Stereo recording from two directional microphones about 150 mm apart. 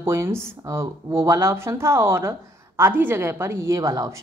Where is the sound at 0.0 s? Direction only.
15° right (ahead or behind).